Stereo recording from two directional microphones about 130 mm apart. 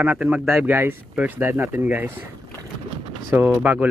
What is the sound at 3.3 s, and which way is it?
Speech, 15° right (ahead or behind).